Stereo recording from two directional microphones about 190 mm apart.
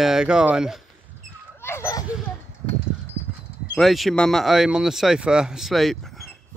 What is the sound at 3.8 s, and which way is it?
Speech, centre (ahead or behind).